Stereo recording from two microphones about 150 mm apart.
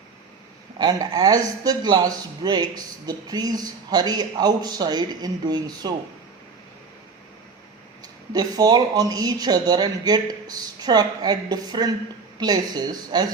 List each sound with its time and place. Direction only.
0.8 s a man's voice: 25° right (ahead or behind)
8.0 s a man's voice: 25° right (ahead or behind)